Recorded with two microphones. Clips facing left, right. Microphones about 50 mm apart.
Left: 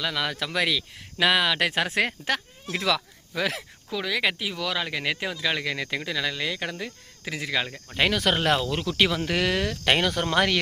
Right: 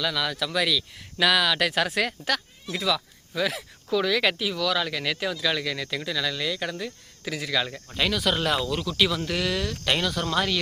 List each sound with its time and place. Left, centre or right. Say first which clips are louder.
0.0 s speech: right 1 dB; left
2.6 s speech: left 1 dB; left
3.9 s speech: right 3 dB; centre; by 7.7 s left
7.9 s speech: left 2 dB; left